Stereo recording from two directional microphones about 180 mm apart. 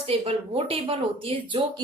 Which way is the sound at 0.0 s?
30° right (ahead or behind).